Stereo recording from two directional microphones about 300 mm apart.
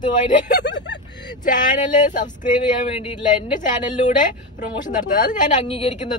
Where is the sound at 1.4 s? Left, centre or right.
Left.